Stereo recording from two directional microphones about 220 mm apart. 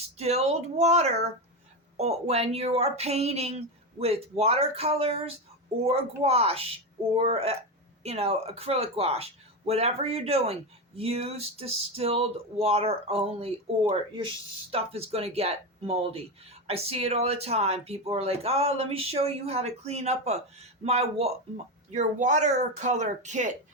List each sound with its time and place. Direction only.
0.2 s speech: 30° right (ahead or behind)